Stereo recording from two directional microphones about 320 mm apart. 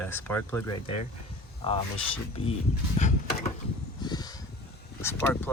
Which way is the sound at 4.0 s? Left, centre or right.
Centre.